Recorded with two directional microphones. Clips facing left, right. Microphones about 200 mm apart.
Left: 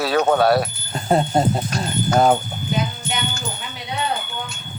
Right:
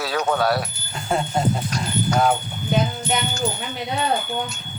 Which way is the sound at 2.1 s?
45° left (ahead or behind).